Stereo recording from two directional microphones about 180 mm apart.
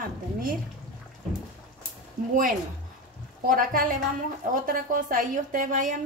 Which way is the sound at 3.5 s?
50° right (ahead or behind).